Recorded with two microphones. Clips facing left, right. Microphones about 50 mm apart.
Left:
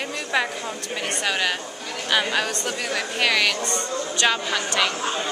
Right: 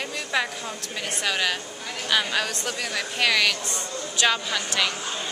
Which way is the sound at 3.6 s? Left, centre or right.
Centre.